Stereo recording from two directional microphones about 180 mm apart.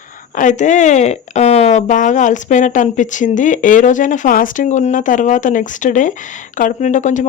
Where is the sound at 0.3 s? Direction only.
45° left (ahead or behind).